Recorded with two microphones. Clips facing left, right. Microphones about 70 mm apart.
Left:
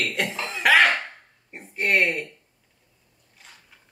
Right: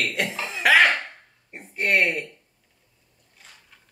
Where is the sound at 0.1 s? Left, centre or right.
Centre.